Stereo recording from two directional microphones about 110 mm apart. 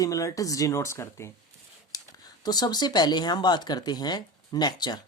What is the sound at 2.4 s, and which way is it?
Speech, 40° left (ahead or behind).